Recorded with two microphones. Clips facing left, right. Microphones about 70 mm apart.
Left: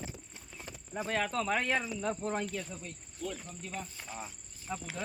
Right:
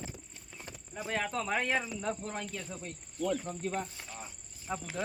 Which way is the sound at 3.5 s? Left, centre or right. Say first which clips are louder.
Right 7 dB; right.